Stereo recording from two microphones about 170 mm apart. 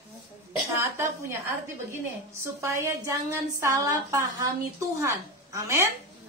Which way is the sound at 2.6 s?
15° right (ahead or behind).